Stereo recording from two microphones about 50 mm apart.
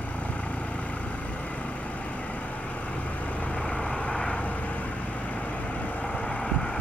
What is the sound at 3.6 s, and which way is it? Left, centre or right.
Vehicle, left.